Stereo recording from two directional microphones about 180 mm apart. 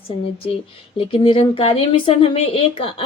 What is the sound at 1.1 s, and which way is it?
Speech, 30° left (ahead or behind).